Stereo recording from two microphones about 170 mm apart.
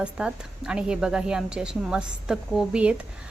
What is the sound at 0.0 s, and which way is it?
A woman's voice, 5° right (ahead or behind).